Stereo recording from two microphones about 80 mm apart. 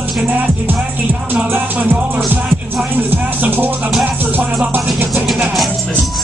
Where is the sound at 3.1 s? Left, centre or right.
Right.